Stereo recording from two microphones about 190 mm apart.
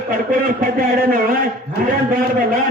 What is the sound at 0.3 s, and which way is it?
A man's voice, 50° right (ahead or behind).